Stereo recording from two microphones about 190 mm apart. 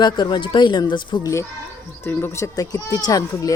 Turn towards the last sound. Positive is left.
turn(degrees=15)  # may be behind; listen again after turning